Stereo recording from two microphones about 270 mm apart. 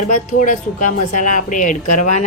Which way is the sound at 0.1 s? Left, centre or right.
Left.